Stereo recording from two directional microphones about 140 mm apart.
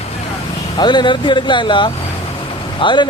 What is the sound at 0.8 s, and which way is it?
Speech, 35° left (ahead or behind).